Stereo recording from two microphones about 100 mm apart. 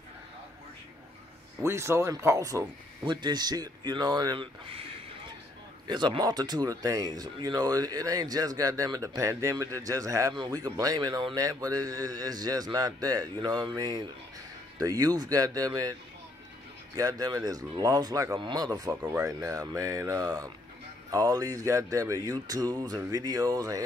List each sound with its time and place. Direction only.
1.6 s speech: 25° right (ahead or behind)
3.1 s speech: 50° right (ahead or behind)
4.4 s speech: 65° right (ahead or behind)
5.9 s speech: 50° right (ahead or behind); by 10.3 s 35° right (ahead or behind)
10.3 s speech: 45° right (ahead or behind)